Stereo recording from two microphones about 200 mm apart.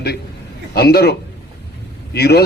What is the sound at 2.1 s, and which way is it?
Speech, 55° left (ahead or behind).